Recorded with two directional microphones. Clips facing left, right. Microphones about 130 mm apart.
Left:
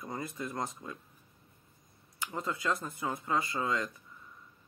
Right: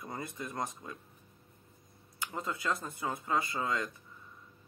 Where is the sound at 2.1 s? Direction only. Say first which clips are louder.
Left 1 dB; 25° right (ahead or behind).